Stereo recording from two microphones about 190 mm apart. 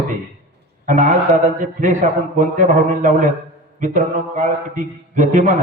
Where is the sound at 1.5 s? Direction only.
40° right (ahead or behind).